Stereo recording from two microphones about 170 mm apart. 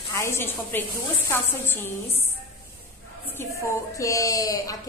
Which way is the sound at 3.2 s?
15° left (ahead or behind).